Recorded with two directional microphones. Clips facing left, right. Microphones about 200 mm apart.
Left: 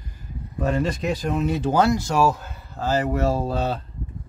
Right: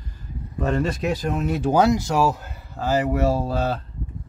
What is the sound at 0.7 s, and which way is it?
Speech, 5° right (ahead or behind).